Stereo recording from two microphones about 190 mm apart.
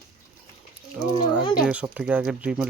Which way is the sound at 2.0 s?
5° right (ahead or behind).